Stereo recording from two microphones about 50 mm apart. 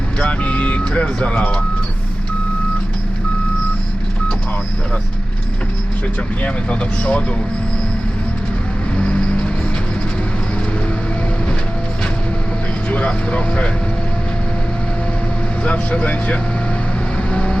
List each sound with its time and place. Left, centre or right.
0.2 s speech: left
6.4 s speech: left
9.0 s vehicle: left
12.9 s speech: left
15.6 s speech: left
17.3 s vehicle: left